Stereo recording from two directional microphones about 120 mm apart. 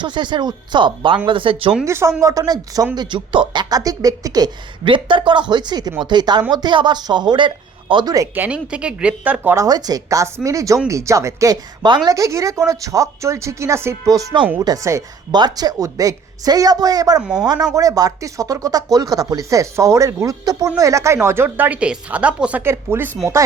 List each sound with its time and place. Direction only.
0.0 s speech: 40° right (ahead or behind)
1.8 s speech: 25° right (ahead or behind); by 8.1 s 45° right (ahead or behind)
8.4 s a woman's voice: 10° right (ahead or behind)
9.6 s a woman's voice: 35° right (ahead or behind)